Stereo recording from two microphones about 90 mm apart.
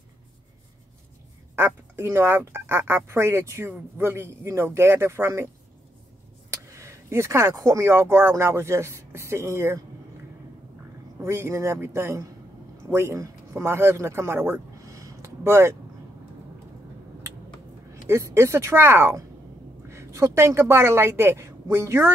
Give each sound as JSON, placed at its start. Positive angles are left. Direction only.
{"t": 1.5, "sound": "speech", "side_deg": -25}
{"t": 6.5, "sound": "speech", "side_deg": -30}
{"t": 11.1, "sound": "a man's voice", "side_deg": -30}
{"t": 18.0, "sound": "a woman's voice", "side_deg": -30}